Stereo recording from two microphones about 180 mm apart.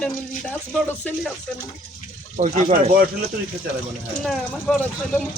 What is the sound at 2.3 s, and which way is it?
Speech, 40° right (ahead or behind).